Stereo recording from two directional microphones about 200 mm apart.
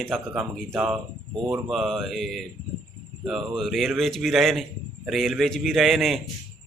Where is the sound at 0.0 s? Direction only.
Centre (ahead or behind).